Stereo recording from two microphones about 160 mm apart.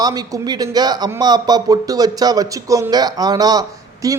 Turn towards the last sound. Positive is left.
turn(degrees=-20)  # may be behind; listen again after turning